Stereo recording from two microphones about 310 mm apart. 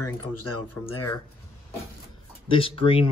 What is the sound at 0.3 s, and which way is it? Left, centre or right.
Speech, left.